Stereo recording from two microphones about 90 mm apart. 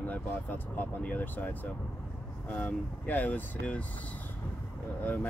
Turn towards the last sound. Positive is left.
turn(degrees=20)  # may be behind; listen again after turning